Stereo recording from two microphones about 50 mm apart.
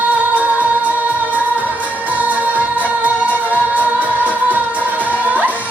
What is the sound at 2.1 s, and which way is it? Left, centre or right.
Music, right.